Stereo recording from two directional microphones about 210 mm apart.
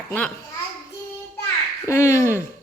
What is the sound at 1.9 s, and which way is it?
Speech, 15° left (ahead or behind).